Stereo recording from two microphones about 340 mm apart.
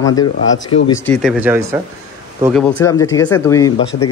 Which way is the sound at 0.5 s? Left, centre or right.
Left.